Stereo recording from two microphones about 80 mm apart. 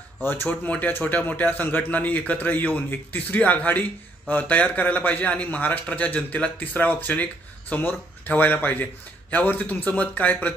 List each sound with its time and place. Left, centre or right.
0.2 s a man's voice: left